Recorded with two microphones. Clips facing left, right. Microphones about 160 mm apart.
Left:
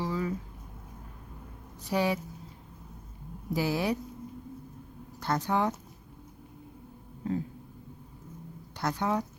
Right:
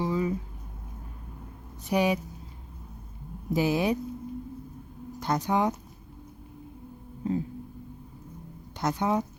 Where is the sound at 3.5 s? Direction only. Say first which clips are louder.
Right 4 dB; 20° right (ahead or behind).